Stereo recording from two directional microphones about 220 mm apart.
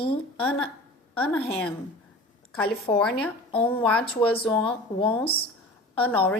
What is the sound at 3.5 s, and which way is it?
A woman's voice, 25° left (ahead or behind).